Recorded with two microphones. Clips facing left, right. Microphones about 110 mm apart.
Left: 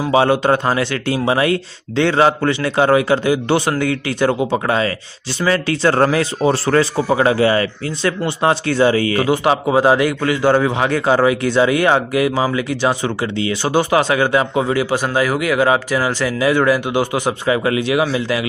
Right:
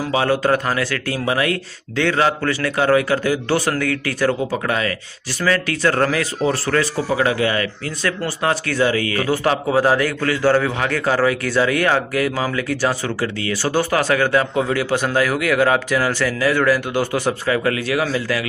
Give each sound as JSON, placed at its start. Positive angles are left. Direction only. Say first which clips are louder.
{"t": 0.0, "sound": "a man's voice", "louder": "left 4 dB", "side_deg": 25}